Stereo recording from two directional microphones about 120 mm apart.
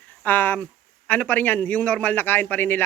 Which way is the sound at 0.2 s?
15° left (ahead or behind).